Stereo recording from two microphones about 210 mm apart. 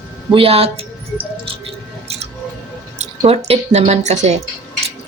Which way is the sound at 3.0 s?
30° right (ahead or behind).